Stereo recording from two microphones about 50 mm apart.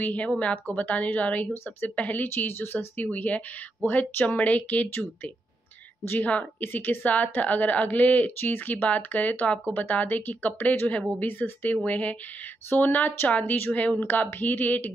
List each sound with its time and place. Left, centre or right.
0.0 s speech: left
2.3 s speech: left
4.1 s speech: left
4.4 s speech: left
4.8 s speech: left
6.1 s speech: left
6.6 s speech: left